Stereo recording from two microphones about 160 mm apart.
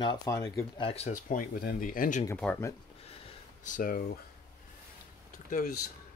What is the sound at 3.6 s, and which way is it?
Speech, 55° left (ahead or behind).